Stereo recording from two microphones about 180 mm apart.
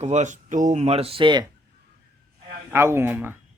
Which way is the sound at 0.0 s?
40° right (ahead or behind).